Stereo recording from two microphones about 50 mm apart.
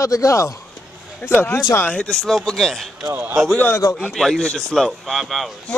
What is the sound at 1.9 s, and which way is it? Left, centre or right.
Speech, centre.